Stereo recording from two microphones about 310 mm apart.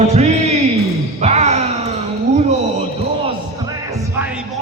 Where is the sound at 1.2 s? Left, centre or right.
Right.